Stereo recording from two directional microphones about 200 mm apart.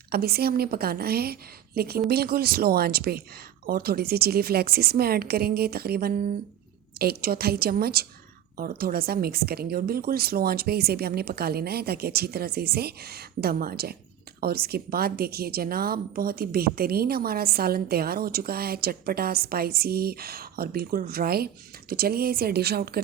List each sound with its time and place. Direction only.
0.1 s a woman's voice: 50° right (ahead or behind)